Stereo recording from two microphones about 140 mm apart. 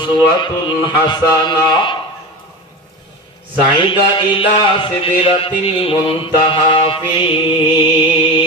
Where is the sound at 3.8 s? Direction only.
35° left (ahead or behind).